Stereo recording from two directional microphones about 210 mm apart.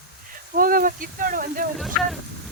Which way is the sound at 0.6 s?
40° right (ahead or behind).